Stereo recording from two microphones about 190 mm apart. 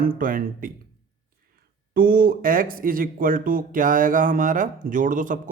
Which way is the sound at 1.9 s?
50° right (ahead or behind).